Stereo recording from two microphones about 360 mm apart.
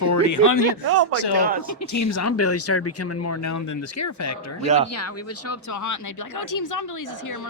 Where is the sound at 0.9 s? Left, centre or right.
Right.